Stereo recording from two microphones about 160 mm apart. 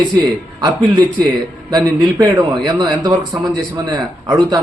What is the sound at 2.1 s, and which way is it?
A man's voice, 20° right (ahead or behind).